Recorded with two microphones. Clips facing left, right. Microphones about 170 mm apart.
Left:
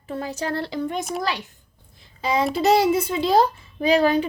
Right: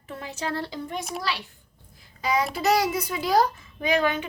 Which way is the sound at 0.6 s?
70° left (ahead or behind).